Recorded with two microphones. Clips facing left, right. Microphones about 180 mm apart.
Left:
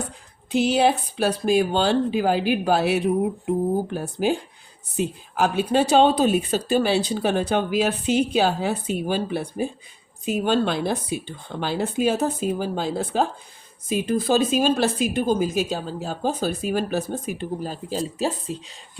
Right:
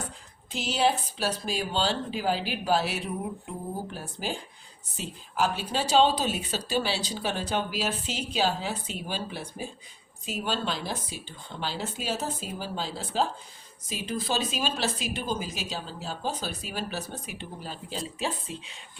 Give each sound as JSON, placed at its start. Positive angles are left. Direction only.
{"t": 0.5, "sound": "a woman's voice", "side_deg": 60}